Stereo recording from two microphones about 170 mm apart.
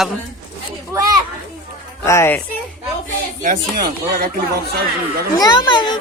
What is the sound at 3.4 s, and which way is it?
Speech, 55° right (ahead or behind).